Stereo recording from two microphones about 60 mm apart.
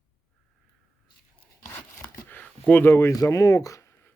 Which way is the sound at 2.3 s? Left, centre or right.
Left.